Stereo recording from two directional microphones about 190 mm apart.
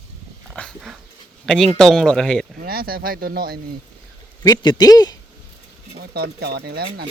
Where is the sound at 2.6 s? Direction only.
50° right (ahead or behind).